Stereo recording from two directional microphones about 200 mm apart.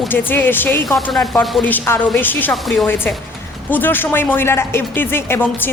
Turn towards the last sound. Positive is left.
turn(degrees=10)  # may be behind; listen again after turning